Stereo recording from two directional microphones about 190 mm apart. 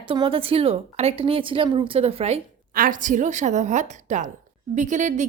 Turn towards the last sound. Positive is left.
turn(degrees=-40)  # may be behind; listen again after turning